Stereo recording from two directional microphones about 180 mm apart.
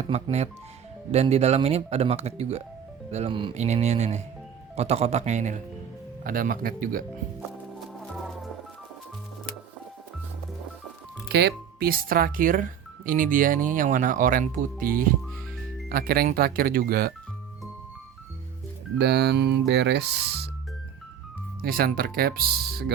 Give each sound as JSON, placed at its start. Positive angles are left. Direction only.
{"t": 0.1, "sound": "speech", "side_deg": -35}
{"t": 11.3, "sound": "speech", "side_deg": -70}
{"t": 18.9, "sound": "speech", "side_deg": -65}
{"t": 21.6, "sound": "speech", "side_deg": -55}